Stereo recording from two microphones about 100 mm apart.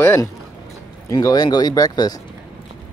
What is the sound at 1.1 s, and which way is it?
Speech, 40° left (ahead or behind).